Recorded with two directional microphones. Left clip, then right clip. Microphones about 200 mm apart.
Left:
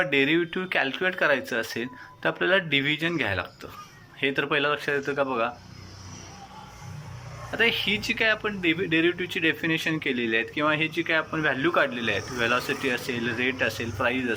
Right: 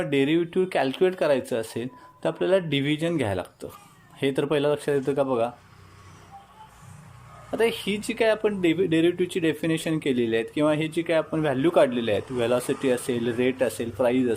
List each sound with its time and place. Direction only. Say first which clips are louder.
0.0 s speech: left 1 dB; 25° right (ahead or behind)
7.5 s speech: left 1 dB; 25° right (ahead or behind)